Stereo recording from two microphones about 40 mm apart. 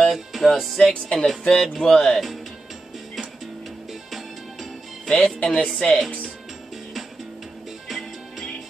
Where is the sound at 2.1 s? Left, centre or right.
Centre.